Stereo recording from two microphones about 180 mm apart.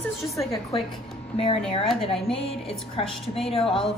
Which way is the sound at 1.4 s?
35° left (ahead or behind).